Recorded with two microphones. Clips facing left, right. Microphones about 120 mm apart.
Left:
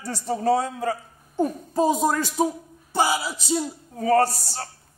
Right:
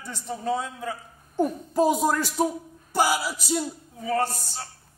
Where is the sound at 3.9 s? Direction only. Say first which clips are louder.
Left 8 dB; 40° left (ahead or behind).